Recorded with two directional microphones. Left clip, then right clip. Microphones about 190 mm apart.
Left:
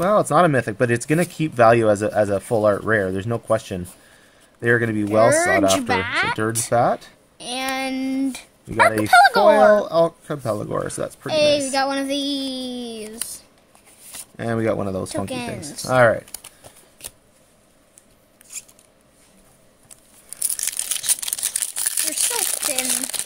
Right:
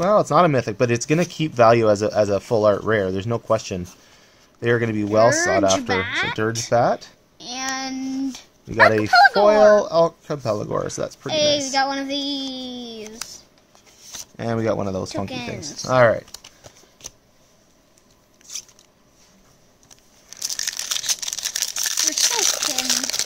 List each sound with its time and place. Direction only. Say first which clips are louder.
0.0 s speech: even; 5° right (ahead or behind)
5.9 s a woman's voice: left 2 dB; 30° left (ahead or behind)
6.7 s speech: even; 5° right (ahead or behind)
7.3 s a sound: left 2 dB; 35° left (ahead or behind)
8.7 s a woman's voice: even; 30° left (ahead or behind)
9.8 s speech: right 1 dB; 10° right (ahead or behind)
11.2 s a woman's voice: left 2 dB; 30° left (ahead or behind)
14.1 s speech: even; 5° right (ahead or behind)
15.2 s a woman's voice: left 2 dB; 35° left (ahead or behind)
15.9 s speech: even; 5° right (ahead or behind)
20.2 s crumpling: right 3 dB; 5° right (ahead or behind)